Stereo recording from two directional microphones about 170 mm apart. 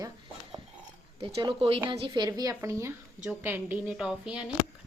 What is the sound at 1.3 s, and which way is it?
Speech, 35° right (ahead or behind).